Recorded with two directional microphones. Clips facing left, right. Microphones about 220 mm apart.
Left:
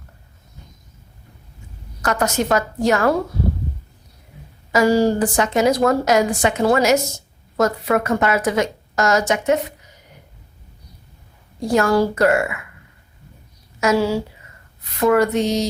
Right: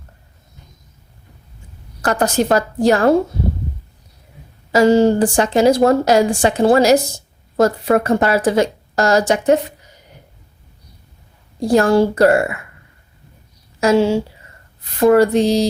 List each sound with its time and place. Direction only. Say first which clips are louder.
2.0 s a woman's voice: right 4 dB; 30° right (ahead or behind)
4.7 s a woman's voice: right 4 dB; 25° right (ahead or behind)
11.6 s a woman's voice: right 4 dB; 30° right (ahead or behind)
13.7 s a woman's voice: right 4 dB; 30° right (ahead or behind)